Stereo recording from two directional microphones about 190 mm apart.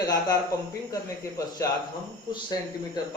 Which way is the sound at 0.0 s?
20° left (ahead or behind).